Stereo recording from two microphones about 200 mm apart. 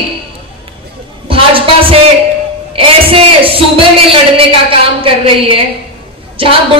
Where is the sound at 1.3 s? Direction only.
25° right (ahead or behind).